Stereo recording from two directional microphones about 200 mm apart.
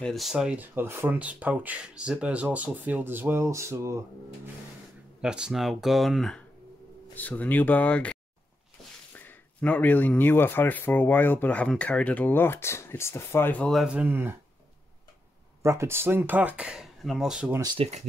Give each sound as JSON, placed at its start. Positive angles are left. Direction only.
{"t": 0.0, "sound": "speech", "side_deg": 0}
{"t": 5.2, "sound": "speech", "side_deg": -5}
{"t": 15.6, "sound": "speech", "side_deg": -15}
{"t": 17.6, "sound": "speech", "side_deg": -20}